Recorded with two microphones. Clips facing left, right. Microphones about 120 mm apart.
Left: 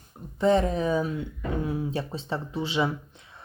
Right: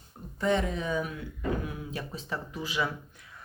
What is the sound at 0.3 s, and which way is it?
Speech, 35° left (ahead or behind).